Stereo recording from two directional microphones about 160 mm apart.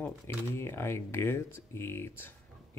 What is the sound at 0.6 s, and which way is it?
Speech, 15° left (ahead or behind).